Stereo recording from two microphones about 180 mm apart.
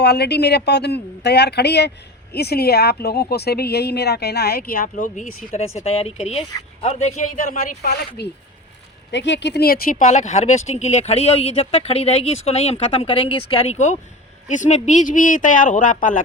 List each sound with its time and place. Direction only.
0.0 s speech: 65° left (ahead or behind); by 5.6 s 45° left (ahead or behind)
5.6 s a man's voice: 35° left (ahead or behind); by 8.3 s 60° left (ahead or behind)
9.1 s a man's voice: 75° left (ahead or behind); by 16.2 s 45° left (ahead or behind)